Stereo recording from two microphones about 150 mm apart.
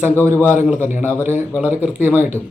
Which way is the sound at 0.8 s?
10° right (ahead or behind).